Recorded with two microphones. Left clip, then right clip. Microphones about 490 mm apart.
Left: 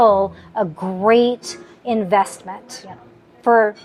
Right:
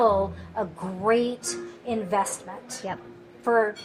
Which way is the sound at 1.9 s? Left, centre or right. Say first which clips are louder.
Left 9 dB; left.